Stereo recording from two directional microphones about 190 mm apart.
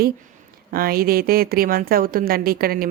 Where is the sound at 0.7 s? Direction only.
50° right (ahead or behind).